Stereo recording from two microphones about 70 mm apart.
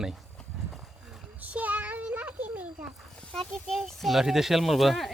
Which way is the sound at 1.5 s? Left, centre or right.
Right.